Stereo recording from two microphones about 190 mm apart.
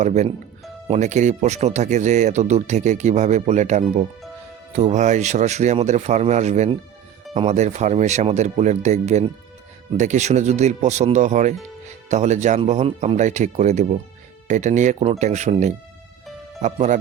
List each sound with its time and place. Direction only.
0.0 s speech: 35° right (ahead or behind)